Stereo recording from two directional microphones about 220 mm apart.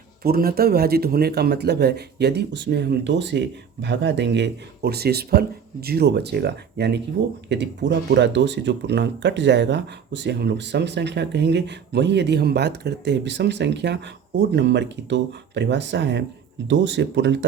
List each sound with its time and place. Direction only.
0.2 s speech: 45° right (ahead or behind)